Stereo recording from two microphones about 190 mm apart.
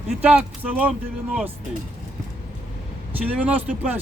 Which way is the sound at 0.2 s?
5° right (ahead or behind).